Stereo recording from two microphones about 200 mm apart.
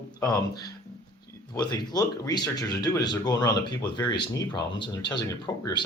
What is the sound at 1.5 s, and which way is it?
Speech, 20° left (ahead or behind).